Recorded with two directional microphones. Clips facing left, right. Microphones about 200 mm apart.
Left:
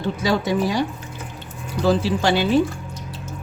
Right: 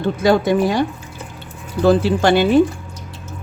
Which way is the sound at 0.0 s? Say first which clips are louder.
Right 6 dB; 55° right (ahead or behind).